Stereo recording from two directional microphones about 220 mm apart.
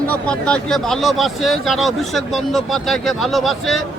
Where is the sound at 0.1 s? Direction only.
5° left (ahead or behind).